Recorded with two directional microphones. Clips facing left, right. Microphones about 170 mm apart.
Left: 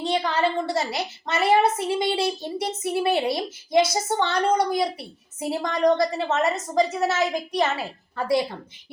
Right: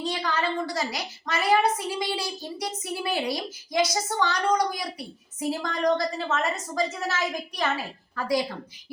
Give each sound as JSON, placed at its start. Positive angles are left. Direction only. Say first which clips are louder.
{"t": 0.0, "sound": "a woman's voice", "louder": "left 5 dB", "side_deg": 25}